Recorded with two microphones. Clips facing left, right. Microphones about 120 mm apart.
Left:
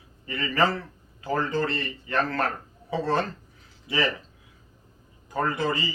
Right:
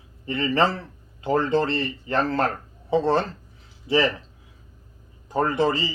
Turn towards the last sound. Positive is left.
turn(degrees=-30)  # may be behind; listen again after turning